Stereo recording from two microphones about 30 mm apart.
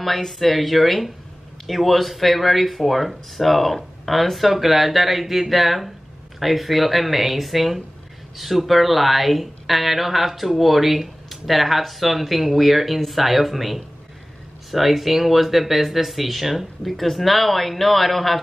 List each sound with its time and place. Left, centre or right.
0.0 s speech: centre